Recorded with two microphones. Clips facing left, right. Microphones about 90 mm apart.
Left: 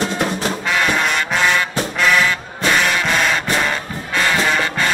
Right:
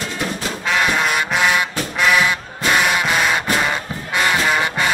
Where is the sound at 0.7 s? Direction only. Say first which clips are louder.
Right 1 dB; 5° right (ahead or behind).